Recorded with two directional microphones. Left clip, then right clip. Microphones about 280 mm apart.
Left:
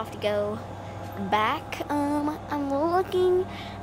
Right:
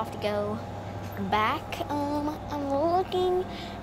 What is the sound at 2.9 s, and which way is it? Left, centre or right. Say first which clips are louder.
Speech: left 2 dB; centre.